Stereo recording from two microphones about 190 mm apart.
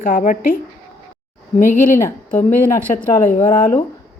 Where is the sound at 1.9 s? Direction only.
10° left (ahead or behind).